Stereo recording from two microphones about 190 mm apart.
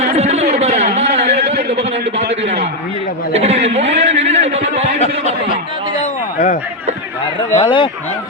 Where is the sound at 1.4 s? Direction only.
60° right (ahead or behind).